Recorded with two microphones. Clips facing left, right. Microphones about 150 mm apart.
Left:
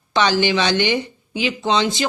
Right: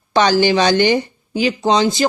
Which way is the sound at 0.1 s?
45° right (ahead or behind).